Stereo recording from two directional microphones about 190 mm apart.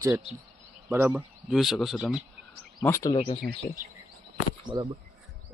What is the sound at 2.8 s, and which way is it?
Speech, 15° left (ahead or behind).